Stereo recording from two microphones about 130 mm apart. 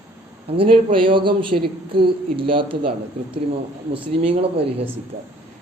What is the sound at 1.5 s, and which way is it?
Speech, 65° right (ahead or behind).